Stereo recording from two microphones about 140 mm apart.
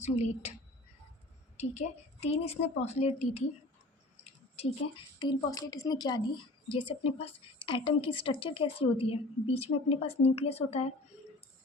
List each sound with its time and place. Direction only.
0.0 s a woman's voice: 50° left (ahead or behind)
2.2 s a woman's voice: 50° left (ahead or behind)
4.2 s a sound: 50° left (ahead or behind)
5.2 s a woman's voice: 30° left (ahead or behind)
7.0 s a woman's voice: 40° left (ahead or behind)